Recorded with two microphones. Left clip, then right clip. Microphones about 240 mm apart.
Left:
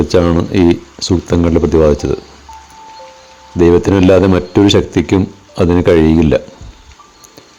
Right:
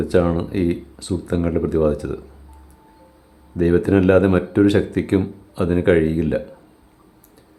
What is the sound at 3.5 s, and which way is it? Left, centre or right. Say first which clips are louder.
Speech: left 8 dB; left.